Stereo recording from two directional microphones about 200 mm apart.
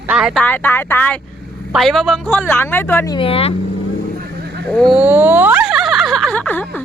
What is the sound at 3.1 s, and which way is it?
Speech, 25° left (ahead or behind).